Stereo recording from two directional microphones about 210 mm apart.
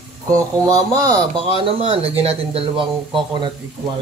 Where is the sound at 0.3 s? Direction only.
15° right (ahead or behind).